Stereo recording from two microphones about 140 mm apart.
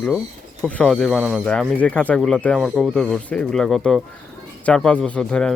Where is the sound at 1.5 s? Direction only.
10° left (ahead or behind).